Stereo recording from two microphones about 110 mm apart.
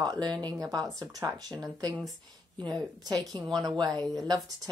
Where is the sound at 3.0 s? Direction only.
35° right (ahead or behind).